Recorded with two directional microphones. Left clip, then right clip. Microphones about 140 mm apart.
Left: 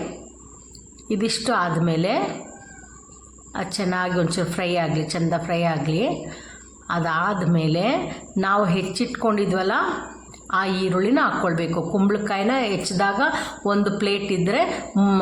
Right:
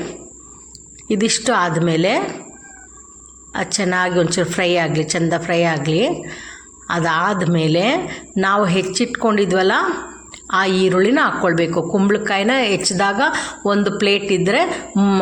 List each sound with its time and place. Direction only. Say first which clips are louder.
1.0 s a woman's voice: right 6 dB; 20° right (ahead or behind)
3.5 s a woman's voice: right 6 dB; 20° right (ahead or behind)